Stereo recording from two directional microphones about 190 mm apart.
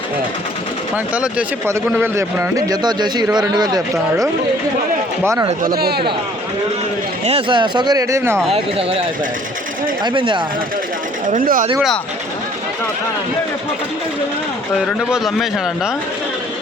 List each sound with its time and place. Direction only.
0.9 s speech: 5° right (ahead or behind)
5.2 s speech: 15° right (ahead or behind)
5.6 s speech: 55° right (ahead or behind)
7.3 s speech: 30° right (ahead or behind)
8.5 s speech: 30° right (ahead or behind)
11.3 s speech: 45° right (ahead or behind)
14.8 s speech: centre (ahead or behind)